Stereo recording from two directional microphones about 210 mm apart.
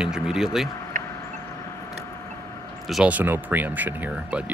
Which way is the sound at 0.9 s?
40° right (ahead or behind).